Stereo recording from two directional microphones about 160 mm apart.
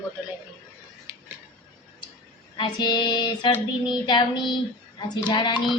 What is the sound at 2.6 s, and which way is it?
Female singing, 30° left (ahead or behind).